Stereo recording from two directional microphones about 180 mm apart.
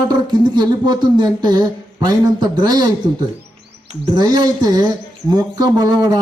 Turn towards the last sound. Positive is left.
turn(degrees=-25)  # may be behind; listen again after turning